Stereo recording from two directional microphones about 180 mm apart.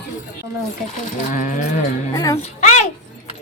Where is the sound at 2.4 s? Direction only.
40° left (ahead or behind).